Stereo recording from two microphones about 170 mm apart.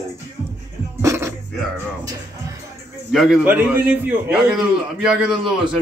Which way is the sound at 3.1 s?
Centre (ahead or behind).